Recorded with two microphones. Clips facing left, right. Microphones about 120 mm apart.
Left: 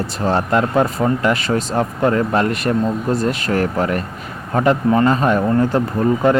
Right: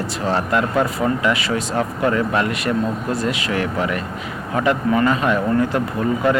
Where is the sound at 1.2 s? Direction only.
40° left (ahead or behind).